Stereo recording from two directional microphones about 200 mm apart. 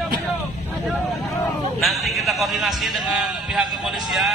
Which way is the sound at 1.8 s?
Centre (ahead or behind).